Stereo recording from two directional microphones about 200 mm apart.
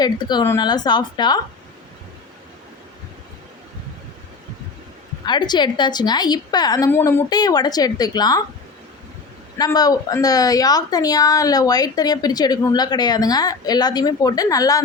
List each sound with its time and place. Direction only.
0.0 s a woman's voice: 20° left (ahead or behind)
5.2 s a woman's voice: 20° left (ahead or behind)
9.6 s a woman's voice: 20° left (ahead or behind)